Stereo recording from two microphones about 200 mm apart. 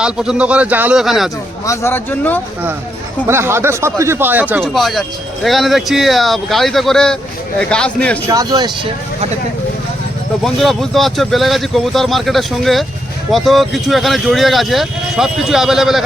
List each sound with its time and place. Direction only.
0.0 s speech: 5° right (ahead or behind)
1.6 s speech: 15° left (ahead or behind)
3.2 s speech: 15° right (ahead or behind); by 8.2 s 5° left (ahead or behind)
8.3 s speech: 20° right (ahead or behind)
10.4 s speech: centre (ahead or behind)